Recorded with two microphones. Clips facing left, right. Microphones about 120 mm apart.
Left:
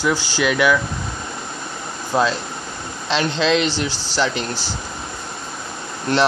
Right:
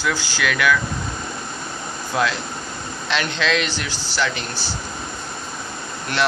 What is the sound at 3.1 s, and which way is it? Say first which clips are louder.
Speech: left 4 dB; 30° left (ahead or behind).